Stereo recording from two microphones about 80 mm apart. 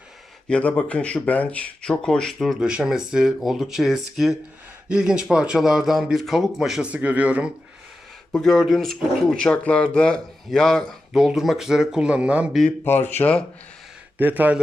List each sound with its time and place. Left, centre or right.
0.4 s speech: centre
2.6 s speech: centre
6.9 s speech: centre
8.3 s speech: centre
11.1 s speech: centre
12.8 s speech: left
14.2 s speech: right